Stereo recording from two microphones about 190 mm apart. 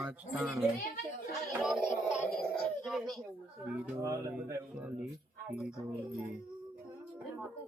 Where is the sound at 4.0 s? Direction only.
15° right (ahead or behind).